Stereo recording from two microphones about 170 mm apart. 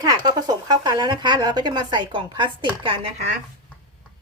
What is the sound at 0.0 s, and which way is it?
Speech, 20° right (ahead or behind).